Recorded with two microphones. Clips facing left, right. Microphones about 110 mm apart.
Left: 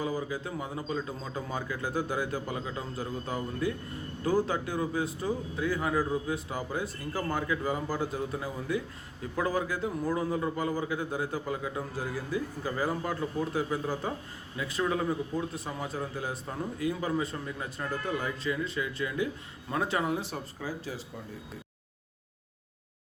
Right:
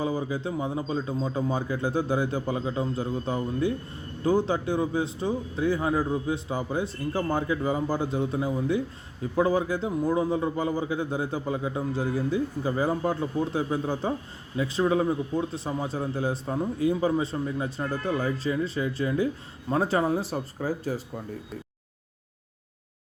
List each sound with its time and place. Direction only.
0.0 s speech: 30° right (ahead or behind); by 21.0 s 45° right (ahead or behind)